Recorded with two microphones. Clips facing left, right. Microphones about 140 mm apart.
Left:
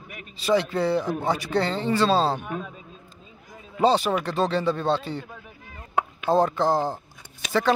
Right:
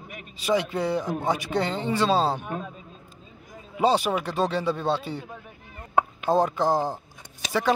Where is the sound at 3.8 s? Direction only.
10° right (ahead or behind).